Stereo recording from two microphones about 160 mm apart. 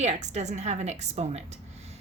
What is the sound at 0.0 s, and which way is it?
A woman's voice, 45° right (ahead or behind).